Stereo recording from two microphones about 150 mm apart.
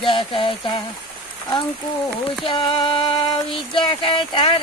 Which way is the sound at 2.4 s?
35° left (ahead or behind).